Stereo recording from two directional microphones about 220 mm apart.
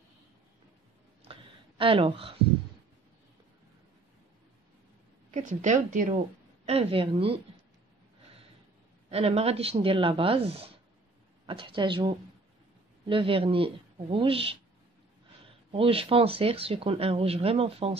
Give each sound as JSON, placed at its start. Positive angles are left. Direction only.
{"t": 1.2, "sound": "a sound", "side_deg": -25}
{"t": 5.3, "sound": "speech", "side_deg": -35}
{"t": 9.1, "sound": "speech", "side_deg": -25}
{"t": 15.7, "sound": "speech", "side_deg": -25}